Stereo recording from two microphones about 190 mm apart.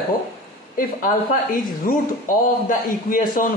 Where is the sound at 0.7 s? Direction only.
45° left (ahead or behind).